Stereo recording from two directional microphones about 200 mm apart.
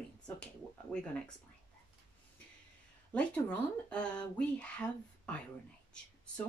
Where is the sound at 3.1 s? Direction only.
5° left (ahead or behind).